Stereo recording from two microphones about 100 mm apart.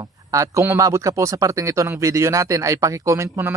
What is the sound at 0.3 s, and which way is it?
Speech, 30° right (ahead or behind).